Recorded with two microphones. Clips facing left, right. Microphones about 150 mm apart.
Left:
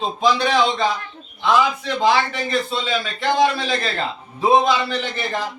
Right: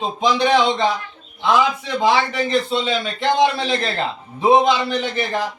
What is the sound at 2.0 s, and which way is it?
A man's voice, 15° right (ahead or behind).